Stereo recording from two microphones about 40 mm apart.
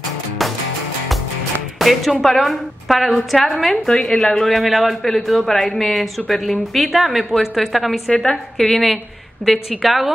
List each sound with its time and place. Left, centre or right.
1.8 s speech: centre
8.3 s a woman's voice: centre
9.7 s speech: centre